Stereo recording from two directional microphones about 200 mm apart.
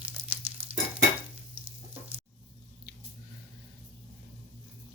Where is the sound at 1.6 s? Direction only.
30° right (ahead or behind).